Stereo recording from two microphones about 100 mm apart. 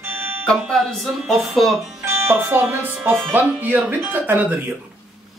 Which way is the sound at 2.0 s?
25° right (ahead or behind).